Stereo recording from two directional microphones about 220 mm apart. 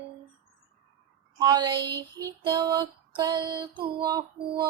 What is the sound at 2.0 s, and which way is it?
Female singing, 15° right (ahead or behind).